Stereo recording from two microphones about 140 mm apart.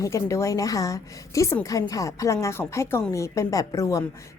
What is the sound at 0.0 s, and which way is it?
A woman's voice, 20° left (ahead or behind).